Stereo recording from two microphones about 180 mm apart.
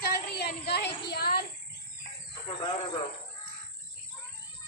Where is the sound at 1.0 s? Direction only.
60° left (ahead or behind).